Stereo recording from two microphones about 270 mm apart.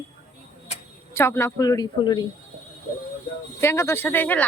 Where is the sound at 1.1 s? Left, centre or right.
Centre.